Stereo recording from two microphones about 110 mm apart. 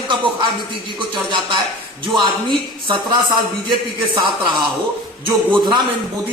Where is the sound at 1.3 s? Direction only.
45° right (ahead or behind).